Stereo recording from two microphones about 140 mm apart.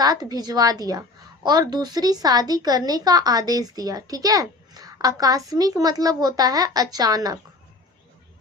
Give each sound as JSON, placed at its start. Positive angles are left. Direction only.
{"t": 0.0, "sound": "speech", "side_deg": -30}